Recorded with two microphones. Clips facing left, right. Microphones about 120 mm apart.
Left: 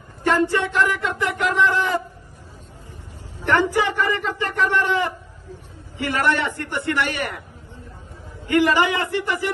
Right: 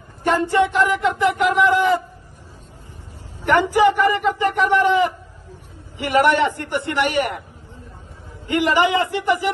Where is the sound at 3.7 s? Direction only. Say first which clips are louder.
Right 6 dB; 15° right (ahead or behind).